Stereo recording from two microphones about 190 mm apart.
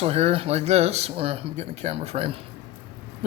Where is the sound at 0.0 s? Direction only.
35° right (ahead or behind).